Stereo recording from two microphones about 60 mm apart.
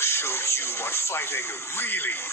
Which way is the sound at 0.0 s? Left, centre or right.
Left.